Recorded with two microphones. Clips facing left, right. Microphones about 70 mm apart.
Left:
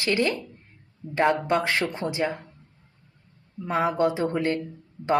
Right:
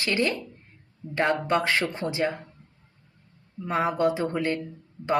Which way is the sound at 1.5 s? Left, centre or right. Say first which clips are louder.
Even; left.